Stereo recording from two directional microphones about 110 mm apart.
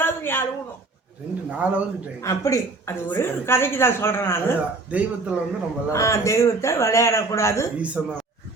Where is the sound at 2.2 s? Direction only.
30° left (ahead or behind).